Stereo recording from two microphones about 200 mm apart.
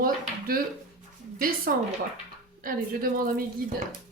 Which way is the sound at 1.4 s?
45° right (ahead or behind).